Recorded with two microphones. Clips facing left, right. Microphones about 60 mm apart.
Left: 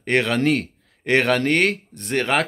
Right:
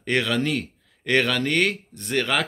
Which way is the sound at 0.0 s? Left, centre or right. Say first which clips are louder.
Left 4 dB; left.